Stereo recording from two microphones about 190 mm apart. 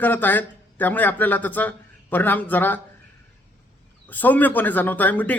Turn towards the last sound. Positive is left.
turn(degrees=10)  # may be behind; listen again after turning